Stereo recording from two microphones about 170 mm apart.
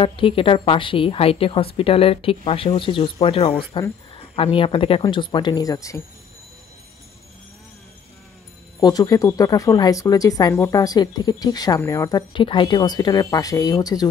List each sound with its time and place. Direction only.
0.0 s a woman's voice: 30° left (ahead or behind)
8.7 s speech: 20° left (ahead or behind)